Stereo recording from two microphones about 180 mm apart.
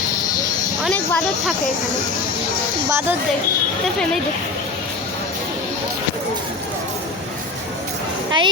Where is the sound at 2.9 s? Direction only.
15° right (ahead or behind).